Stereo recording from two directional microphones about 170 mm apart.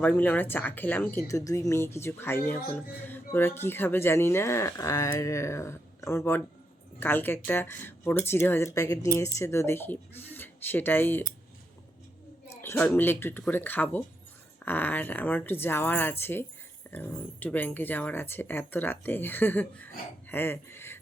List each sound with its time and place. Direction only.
0.0 s speech: 10° left (ahead or behind)
12.6 s speech: 10° left (ahead or behind)